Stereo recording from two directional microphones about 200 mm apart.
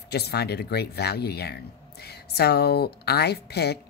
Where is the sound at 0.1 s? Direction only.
55° left (ahead or behind).